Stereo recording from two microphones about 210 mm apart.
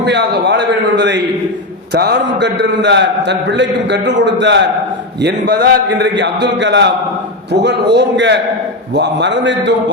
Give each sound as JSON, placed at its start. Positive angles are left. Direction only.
{"t": 0.0, "sound": "a man's voice", "side_deg": -55}